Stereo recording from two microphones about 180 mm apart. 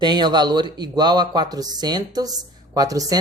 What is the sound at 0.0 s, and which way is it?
Speech, 25° right (ahead or behind).